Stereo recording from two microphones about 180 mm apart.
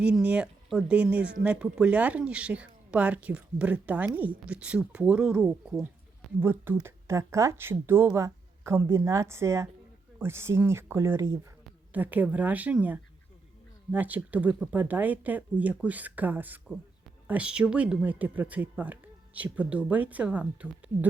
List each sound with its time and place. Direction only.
0.0 s speech: 5° right (ahead or behind)